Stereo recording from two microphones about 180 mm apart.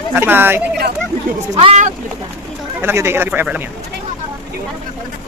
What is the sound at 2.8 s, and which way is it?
Speech, 15° right (ahead or behind).